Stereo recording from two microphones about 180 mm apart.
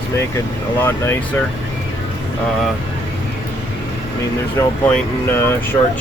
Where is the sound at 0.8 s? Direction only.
10° left (ahead or behind).